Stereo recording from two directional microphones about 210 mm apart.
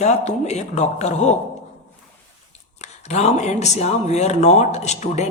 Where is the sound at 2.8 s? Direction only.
30° left (ahead or behind).